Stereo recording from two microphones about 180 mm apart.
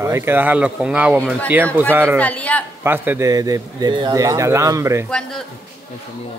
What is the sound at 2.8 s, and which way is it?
Speech, 10° right (ahead or behind).